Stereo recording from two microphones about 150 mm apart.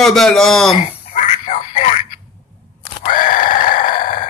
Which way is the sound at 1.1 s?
55° left (ahead or behind).